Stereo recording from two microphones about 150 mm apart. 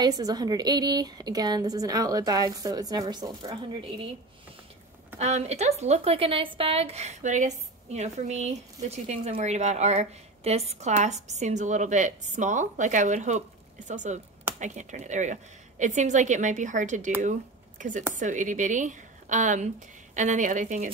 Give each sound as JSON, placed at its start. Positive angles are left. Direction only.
{"t": 0.0, "sound": "a woman's voice", "side_deg": -25}
{"t": 5.2, "sound": "a woman's voice", "side_deg": -45}